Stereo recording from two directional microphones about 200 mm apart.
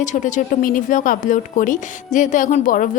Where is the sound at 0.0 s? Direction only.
40° left (ahead or behind).